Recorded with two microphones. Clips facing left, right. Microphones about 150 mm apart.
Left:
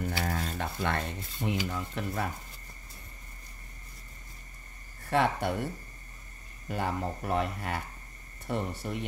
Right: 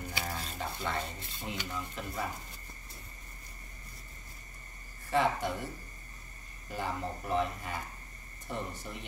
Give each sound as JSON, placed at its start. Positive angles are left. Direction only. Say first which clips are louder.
{"t": 0.2, "sound": "speech", "louder": "left 5 dB", "side_deg": 60}
{"t": 5.1, "sound": "speech", "louder": "left 2 dB", "side_deg": 60}
{"t": 6.7, "sound": "speech", "louder": "left 4 dB", "side_deg": 65}